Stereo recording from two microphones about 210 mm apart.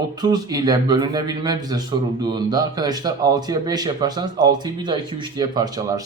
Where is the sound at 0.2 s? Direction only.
20° right (ahead or behind).